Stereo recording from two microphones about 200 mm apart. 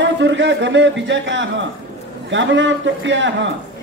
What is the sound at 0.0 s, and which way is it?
Speech, 65° right (ahead or behind).